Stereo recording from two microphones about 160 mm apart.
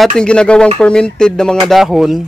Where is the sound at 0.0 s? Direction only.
5° left (ahead or behind).